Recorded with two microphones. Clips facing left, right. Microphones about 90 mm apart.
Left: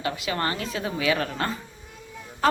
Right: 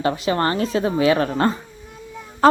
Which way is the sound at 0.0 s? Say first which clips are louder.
Right 7 dB; 35° right (ahead or behind).